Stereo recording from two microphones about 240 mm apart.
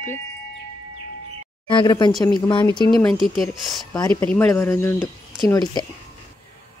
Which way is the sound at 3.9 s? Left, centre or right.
Centre.